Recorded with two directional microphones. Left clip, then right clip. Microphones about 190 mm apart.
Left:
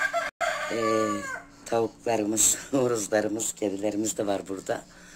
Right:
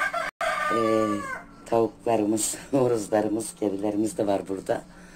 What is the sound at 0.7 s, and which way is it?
Speech, 10° left (ahead or behind).